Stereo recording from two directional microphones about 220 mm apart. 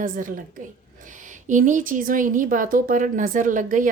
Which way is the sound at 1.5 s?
35° right (ahead or behind).